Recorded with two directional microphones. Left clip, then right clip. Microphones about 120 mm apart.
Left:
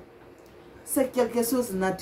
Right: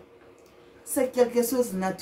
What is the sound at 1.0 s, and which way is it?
Speech, 25° right (ahead or behind).